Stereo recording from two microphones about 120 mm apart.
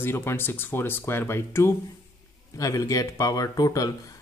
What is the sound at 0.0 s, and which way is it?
Speech, 20° left (ahead or behind).